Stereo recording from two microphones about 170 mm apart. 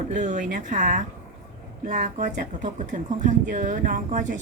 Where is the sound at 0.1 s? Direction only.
45° right (ahead or behind).